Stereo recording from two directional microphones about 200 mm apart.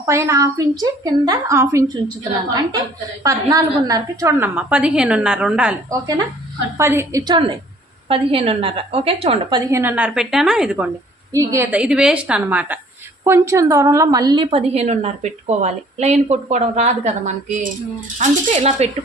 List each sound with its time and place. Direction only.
0.0 s a woman's voice: 15° right (ahead or behind)
3.2 s a woman's voice: 20° right (ahead or behind)
5.9 s a woman's voice: 20° right (ahead or behind)